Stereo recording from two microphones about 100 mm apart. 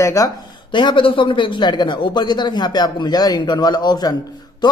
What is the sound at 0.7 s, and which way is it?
A man's voice, 55° left (ahead or behind).